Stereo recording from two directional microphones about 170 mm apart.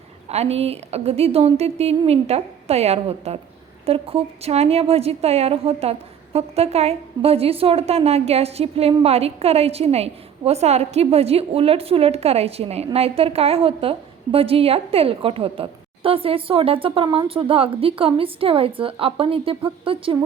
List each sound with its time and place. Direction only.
0.3 s a woman's voice: 40° right (ahead or behind)